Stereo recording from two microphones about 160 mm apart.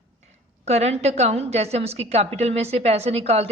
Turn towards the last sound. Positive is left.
turn(degrees=-40)  # may be behind; listen again after turning